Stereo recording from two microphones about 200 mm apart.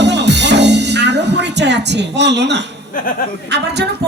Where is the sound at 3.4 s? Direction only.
55° right (ahead or behind).